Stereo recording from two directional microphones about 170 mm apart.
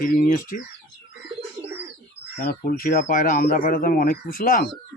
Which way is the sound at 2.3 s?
60° left (ahead or behind).